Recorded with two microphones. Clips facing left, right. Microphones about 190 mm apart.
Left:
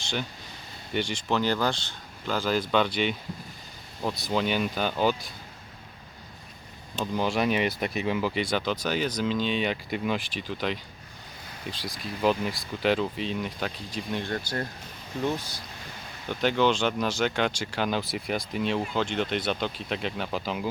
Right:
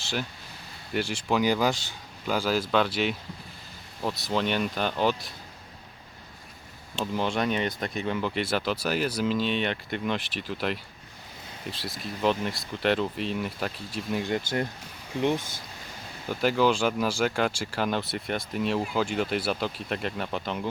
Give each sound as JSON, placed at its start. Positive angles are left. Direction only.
{"t": 0.9, "sound": "speech", "side_deg": -5}
{"t": 7.0, "sound": "speech", "side_deg": 0}
{"t": 15.2, "sound": "speech", "side_deg": -20}
{"t": 16.3, "sound": "speech", "side_deg": -5}